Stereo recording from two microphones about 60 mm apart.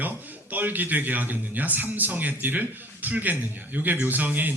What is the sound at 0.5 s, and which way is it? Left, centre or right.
A man's voice, right.